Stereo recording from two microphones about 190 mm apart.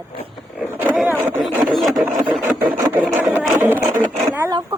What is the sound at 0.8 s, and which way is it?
Speech, 10° right (ahead or behind).